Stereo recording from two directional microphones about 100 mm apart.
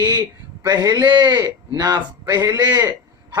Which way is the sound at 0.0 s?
40° right (ahead or behind).